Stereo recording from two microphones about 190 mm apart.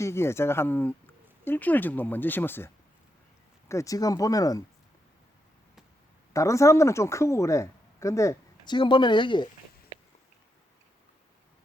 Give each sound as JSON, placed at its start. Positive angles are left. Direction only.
{"t": 0.0, "sound": "speech", "side_deg": 15}
{"t": 6.3, "sound": "speech", "side_deg": 15}